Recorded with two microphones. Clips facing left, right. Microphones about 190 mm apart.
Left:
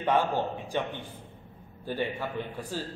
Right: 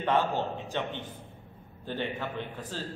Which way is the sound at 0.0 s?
15° left (ahead or behind).